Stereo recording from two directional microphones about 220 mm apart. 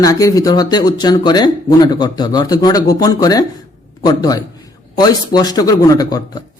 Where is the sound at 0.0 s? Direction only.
15° left (ahead or behind).